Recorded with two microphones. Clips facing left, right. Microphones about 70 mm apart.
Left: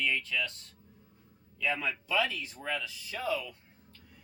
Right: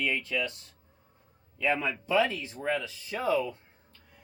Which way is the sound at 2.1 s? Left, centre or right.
Right.